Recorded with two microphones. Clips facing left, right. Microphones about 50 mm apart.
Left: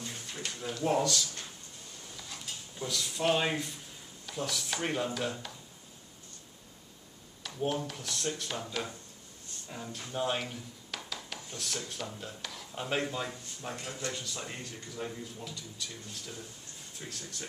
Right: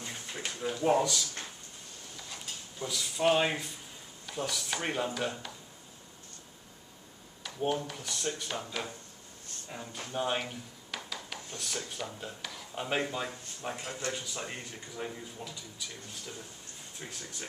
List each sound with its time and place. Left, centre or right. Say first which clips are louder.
0.0 s a sound: right 1 dB; right; by 3.7 s centre
4.3 s speech: right 1 dB; centre
7.4 s speech: right 1 dB; centre